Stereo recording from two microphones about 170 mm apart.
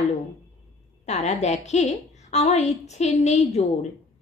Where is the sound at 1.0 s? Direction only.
40° left (ahead or behind).